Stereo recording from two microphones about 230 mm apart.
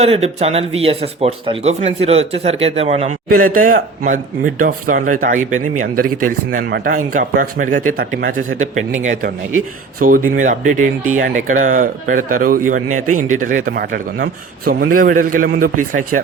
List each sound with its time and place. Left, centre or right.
0.0 s speech: right
8.4 s speech: right
10.0 s speech: right
13.1 s speech: right
13.4 s speech: right